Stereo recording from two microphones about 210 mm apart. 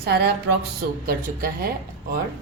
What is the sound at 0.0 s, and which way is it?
A woman's voice, 50° right (ahead or behind).